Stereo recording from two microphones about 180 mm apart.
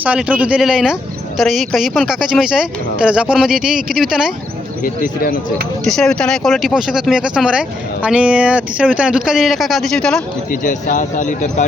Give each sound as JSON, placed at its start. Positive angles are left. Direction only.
{"t": 0.0, "sound": "speech", "side_deg": -5}
{"t": 4.8, "sound": "speech", "side_deg": 50}
{"t": 5.8, "sound": "speech", "side_deg": 0}
{"t": 10.5, "sound": "speech", "side_deg": 45}